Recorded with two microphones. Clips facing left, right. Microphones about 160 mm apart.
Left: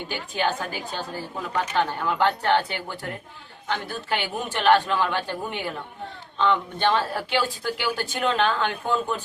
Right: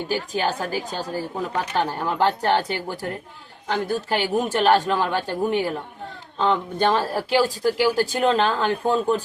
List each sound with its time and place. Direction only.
0.1 s a woman's voice: 40° right (ahead or behind)